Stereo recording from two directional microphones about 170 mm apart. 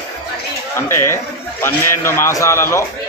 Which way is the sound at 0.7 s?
15° left (ahead or behind).